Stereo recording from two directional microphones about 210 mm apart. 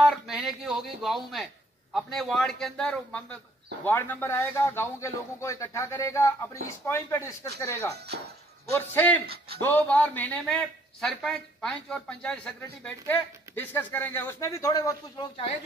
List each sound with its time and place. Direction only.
0.0 s a sound: centre (ahead or behind)
2.0 s a man's voice: centre (ahead or behind)
8.7 s speech: 10° left (ahead or behind)
9.2 s speech: 50° right (ahead or behind)
9.6 s a man's voice: 10° left (ahead or behind)